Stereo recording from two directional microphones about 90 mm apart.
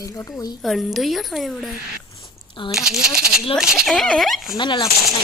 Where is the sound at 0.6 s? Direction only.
Centre (ahead or behind).